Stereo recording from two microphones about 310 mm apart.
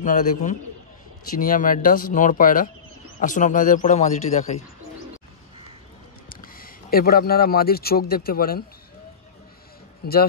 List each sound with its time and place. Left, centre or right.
0.0 s speech: left
6.2 s speech: left
10.0 s a man's voice: left